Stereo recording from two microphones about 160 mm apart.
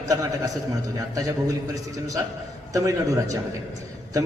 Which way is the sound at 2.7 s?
20° right (ahead or behind).